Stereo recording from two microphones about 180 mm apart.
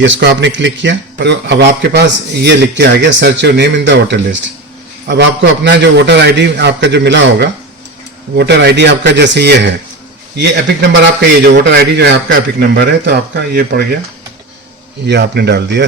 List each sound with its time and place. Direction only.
0.0 s a man's voice: 85° right; by 13.8 s 60° right (ahead or behind)
15.0 s a man's voice: 70° right (ahead or behind)